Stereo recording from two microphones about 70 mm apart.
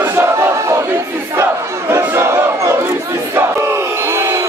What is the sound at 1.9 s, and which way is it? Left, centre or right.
Battle cry, right.